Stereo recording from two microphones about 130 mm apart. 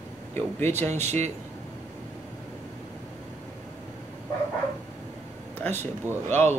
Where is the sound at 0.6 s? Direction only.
20° left (ahead or behind).